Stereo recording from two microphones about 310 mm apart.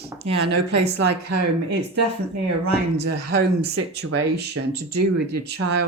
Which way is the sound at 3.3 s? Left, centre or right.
Right.